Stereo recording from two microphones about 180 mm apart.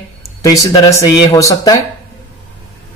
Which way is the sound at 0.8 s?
20° left (ahead or behind).